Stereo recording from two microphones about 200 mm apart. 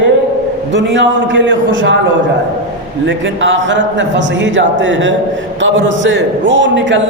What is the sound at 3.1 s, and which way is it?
A man's voice, 70° right (ahead or behind).